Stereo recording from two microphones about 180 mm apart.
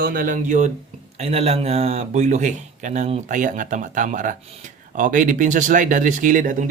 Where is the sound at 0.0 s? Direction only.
55° right (ahead or behind).